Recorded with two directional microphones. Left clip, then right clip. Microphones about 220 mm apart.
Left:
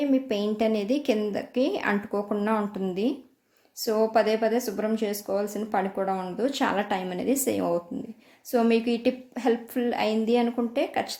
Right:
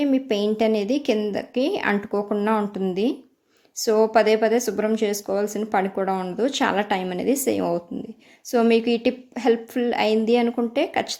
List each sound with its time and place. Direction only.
0.0 s a woman's voice: 25° right (ahead or behind)